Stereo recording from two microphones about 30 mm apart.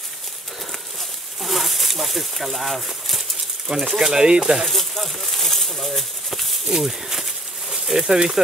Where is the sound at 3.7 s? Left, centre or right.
Centre.